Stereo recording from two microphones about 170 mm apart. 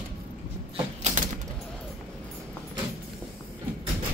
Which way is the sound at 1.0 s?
50° right (ahead or behind).